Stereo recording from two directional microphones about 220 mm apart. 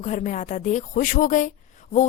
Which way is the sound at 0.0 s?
35° left (ahead or behind).